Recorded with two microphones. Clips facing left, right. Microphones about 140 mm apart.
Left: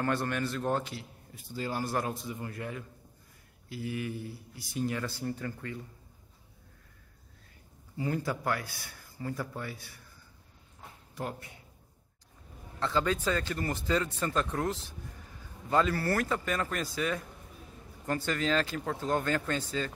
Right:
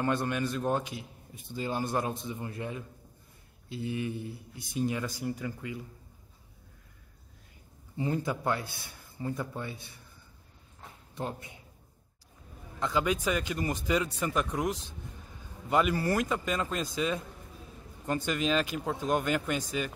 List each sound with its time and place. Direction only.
0.0 s a man's voice: 20° right (ahead or behind)
8.0 s a man's voice: 20° right (ahead or behind)
11.1 s a man's voice: 20° right (ahead or behind)
12.8 s speech: 15° right (ahead or behind)